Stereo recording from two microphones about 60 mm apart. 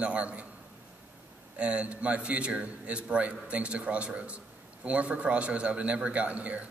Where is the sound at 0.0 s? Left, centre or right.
Right.